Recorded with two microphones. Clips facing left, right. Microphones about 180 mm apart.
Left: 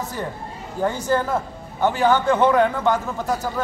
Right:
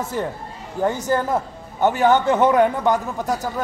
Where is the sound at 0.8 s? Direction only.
20° right (ahead or behind).